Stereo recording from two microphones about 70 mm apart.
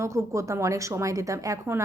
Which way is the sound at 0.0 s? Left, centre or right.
Right.